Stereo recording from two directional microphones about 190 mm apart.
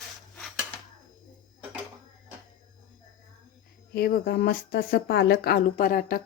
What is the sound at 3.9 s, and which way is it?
Speech, 55° left (ahead or behind).